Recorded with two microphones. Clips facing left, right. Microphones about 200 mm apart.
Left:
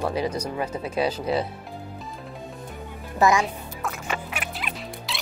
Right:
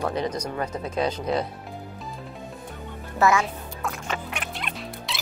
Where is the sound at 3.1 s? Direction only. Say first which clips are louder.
Left 1 dB; 15° left (ahead or behind).